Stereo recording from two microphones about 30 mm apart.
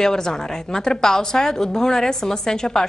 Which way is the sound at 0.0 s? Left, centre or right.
Centre.